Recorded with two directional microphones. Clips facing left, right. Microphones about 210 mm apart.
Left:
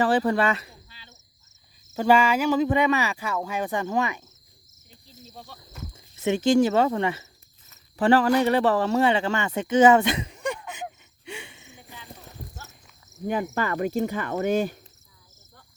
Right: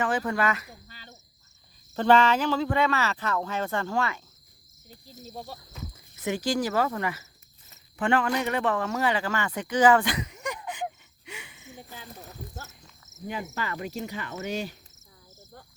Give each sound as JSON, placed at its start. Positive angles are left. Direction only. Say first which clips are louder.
{"t": 0.0, "sound": "speech", "louder": "left 5 dB", "side_deg": 35}
{"t": 0.9, "sound": "cricket", "louder": "right 4 dB", "side_deg": -45}
{"t": 1.9, "sound": "speech", "louder": "left 1 dB", "side_deg": 10}
{"t": 6.2, "sound": "speech", "louder": "left 8 dB", "side_deg": 25}
{"t": 11.3, "sound": "a sound", "louder": "left 5 dB", "side_deg": 30}
{"t": 13.2, "sound": "cricket", "louder": "left 7 dB", "side_deg": 55}